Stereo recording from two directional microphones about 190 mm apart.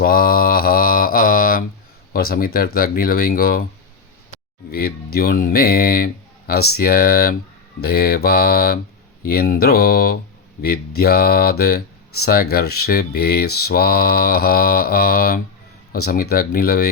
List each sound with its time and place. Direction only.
0.0 s mantra: 50° left (ahead or behind)
2.1 s speech: 50° left (ahead or behind)
4.7 s speech: 55° left (ahead or behind)